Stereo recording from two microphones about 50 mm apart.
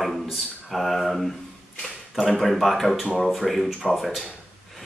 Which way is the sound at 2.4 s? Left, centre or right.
Centre.